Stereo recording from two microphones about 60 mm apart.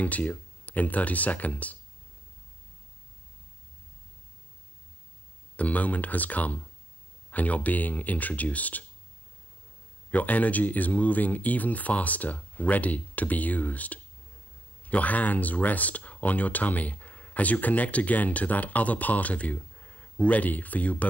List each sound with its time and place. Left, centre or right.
0.0 s speech: left
5.6 s speech: left
10.1 s speech: left